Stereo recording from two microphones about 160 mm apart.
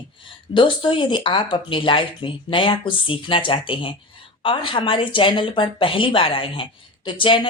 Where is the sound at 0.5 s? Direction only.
30° left (ahead or behind).